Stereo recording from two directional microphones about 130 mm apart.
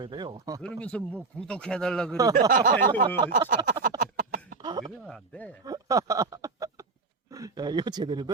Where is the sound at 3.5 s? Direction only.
90° right.